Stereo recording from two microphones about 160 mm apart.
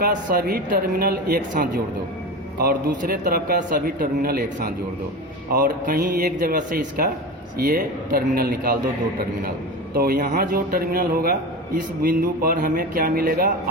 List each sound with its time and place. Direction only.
0.0 s a man's voice: 70° right (ahead or behind)
5.6 s a man's voice: 70° right (ahead or behind)
9.9 s a man's voice: 70° right (ahead or behind)